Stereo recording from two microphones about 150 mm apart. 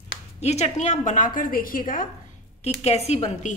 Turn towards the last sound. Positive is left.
turn(degrees=50)  # may be behind; listen again after turning